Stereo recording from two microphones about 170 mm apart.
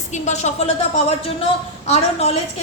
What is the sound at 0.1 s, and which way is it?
Speech, 40° left (ahead or behind).